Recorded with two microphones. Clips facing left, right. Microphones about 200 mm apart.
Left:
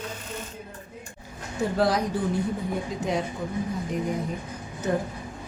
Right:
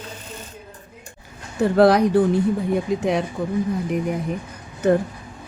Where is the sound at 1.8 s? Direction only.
65° right (ahead or behind).